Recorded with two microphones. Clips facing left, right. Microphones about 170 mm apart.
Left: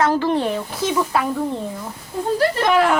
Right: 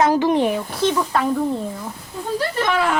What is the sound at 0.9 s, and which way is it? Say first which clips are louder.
Speech: left 2 dB; 5° left (ahead or behind).